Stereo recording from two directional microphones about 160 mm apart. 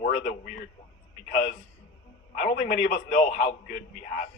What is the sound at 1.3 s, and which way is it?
A man's voice, 55° left (ahead or behind).